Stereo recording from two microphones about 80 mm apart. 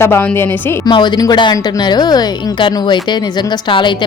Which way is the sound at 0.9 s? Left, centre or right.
Left.